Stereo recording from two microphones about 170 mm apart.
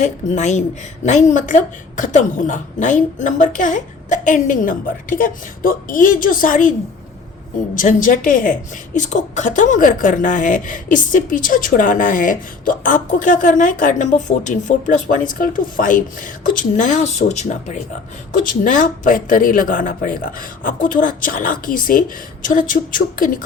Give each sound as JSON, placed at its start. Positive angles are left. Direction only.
{"t": 0.0, "sound": "a woman's voice", "side_deg": 45}
{"t": 8.0, "sound": "a woman's voice", "side_deg": 50}